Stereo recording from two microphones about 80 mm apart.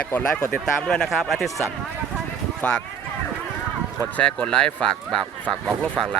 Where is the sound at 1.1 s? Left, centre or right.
Centre.